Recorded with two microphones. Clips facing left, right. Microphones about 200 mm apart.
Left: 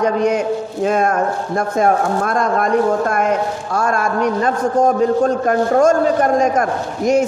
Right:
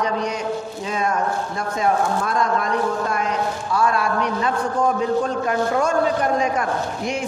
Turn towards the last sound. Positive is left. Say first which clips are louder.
# left 9 dB
turn(degrees=45)  # may be behind; listen again after turning